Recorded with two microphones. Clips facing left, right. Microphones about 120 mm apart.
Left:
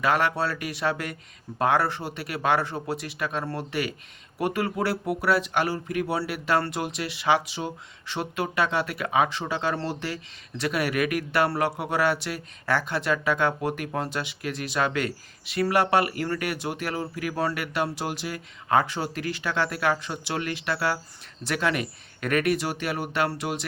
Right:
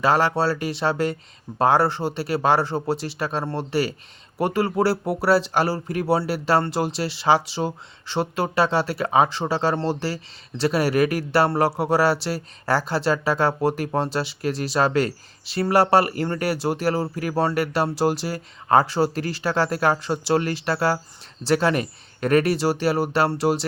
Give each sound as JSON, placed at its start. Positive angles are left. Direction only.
{"t": 0.0, "sound": "speech", "side_deg": -30}